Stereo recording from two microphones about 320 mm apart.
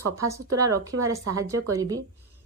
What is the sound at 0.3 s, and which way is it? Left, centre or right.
Speech, centre.